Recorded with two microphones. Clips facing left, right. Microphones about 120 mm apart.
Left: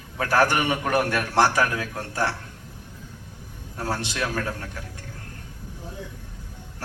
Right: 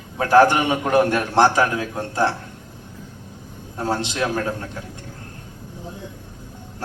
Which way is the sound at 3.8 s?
20° right (ahead or behind).